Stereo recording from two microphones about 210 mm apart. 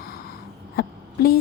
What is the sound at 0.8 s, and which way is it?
Speech, 45° left (ahead or behind).